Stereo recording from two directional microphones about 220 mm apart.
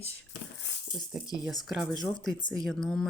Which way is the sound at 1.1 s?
Centre (ahead or behind).